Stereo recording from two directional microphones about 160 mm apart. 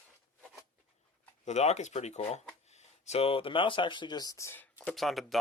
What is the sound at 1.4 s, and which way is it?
Speech, 45° left (ahead or behind).